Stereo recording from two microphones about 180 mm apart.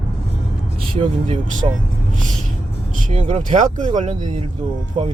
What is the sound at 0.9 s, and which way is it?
Speech, 30° right (ahead or behind).